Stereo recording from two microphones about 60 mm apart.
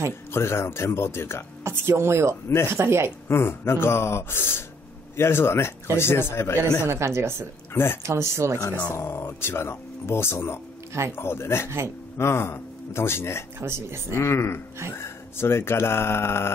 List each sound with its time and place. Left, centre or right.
0.3 s speech: left
1.6 s speech: right
3.3 s speech: left
6.9 s speech: right
7.7 s speech: left
8.0 s speech: right
8.5 s speech: left
8.9 s speech: left
13.6 s speech: right
14.1 s speech: left